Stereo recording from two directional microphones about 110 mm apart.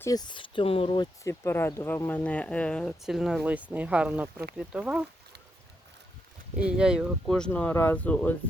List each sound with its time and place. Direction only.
0.0 s speech: 35° left (ahead or behind); by 1.0 s 55° left (ahead or behind)
1.2 s speech: 25° left (ahead or behind)
3.0 s speech: 5° right (ahead or behind)
3.4 s speech: 15° right (ahead or behind)
6.6 s speech: 10° right (ahead or behind)
7.3 s speech: 5° left (ahead or behind)